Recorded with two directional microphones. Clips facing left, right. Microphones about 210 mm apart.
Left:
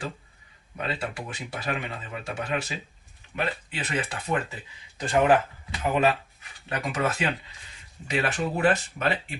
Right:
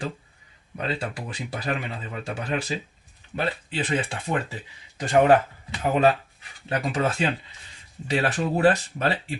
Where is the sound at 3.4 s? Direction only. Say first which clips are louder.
Right 3 dB; 30° right (ahead or behind).